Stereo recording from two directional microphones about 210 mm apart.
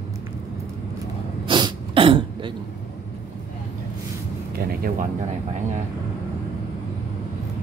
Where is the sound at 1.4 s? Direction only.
20° right (ahead or behind).